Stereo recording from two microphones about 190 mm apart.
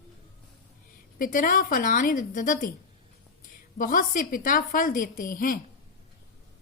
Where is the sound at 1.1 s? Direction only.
45° left (ahead or behind).